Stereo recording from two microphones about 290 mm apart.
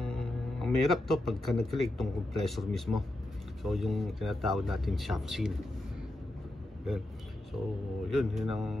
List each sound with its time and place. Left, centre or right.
0.0 s speech: centre
8.1 s speech: centre